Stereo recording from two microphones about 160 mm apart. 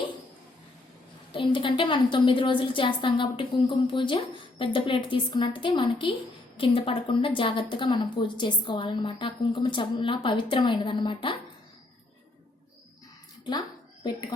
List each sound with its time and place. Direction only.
1.3 s a woman's voice: 30° left (ahead or behind)
14.0 s speech: 25° left (ahead or behind)